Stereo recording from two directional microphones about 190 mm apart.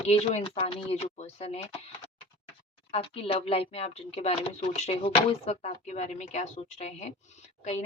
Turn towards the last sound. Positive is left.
turn(degrees=35)  # may be behind; listen again after turning